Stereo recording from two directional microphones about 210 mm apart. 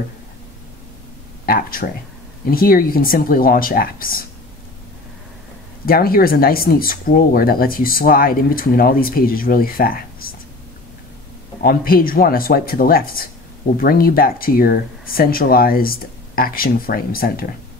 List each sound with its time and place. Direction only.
1.4 s speech: 45° left (ahead or behind)
5.9 s speech: 45° left (ahead or behind)
11.6 s speech: 45° left (ahead or behind)